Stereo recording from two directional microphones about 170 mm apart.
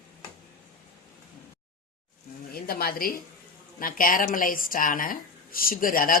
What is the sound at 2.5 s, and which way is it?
A woman's voice, 65° left (ahead or behind).